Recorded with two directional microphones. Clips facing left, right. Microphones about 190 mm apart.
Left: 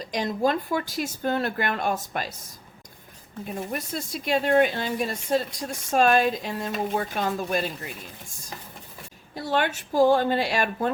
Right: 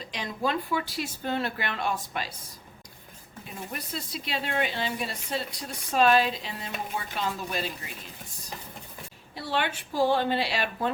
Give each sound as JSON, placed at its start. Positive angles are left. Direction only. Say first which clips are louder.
{"t": 0.0, "sound": "speech", "louder": "left 6 dB", "side_deg": 45}
{"t": 3.4, "sound": "speech", "louder": "left 7 dB", "side_deg": 45}
{"t": 9.3, "sound": "speech", "louder": "left 4 dB", "side_deg": 45}